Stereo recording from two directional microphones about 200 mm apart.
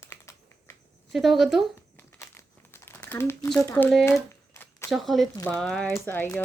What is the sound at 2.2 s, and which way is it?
Crumpling, 10° left (ahead or behind).